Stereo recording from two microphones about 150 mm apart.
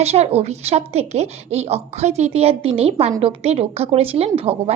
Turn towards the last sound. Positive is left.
turn(degrees=-40)  # may be behind; listen again after turning